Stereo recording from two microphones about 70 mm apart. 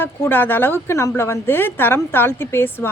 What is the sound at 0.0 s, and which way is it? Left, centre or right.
A woman's voice, left.